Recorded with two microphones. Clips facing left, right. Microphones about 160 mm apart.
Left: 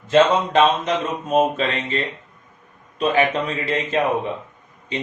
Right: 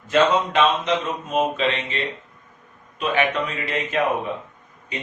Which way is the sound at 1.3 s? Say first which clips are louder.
Left 3 dB; 40° left (ahead or behind).